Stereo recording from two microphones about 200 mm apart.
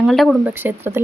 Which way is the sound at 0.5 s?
10° right (ahead or behind).